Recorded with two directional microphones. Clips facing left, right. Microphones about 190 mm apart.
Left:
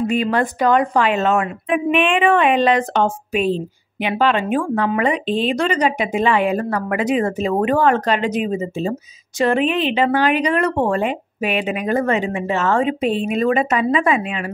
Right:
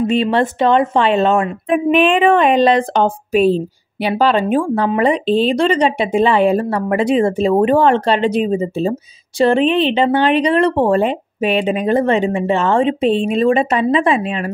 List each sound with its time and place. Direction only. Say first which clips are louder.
0.0 s a woman's voice: right 3 dB; 25° right (ahead or behind)